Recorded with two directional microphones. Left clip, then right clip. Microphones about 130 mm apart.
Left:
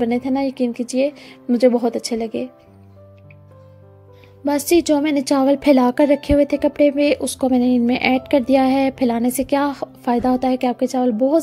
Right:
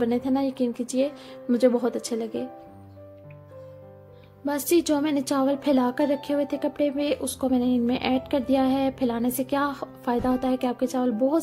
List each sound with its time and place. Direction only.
0.0 s a woman's voice: 25° left (ahead or behind)
4.5 s a woman's voice: 35° left (ahead or behind)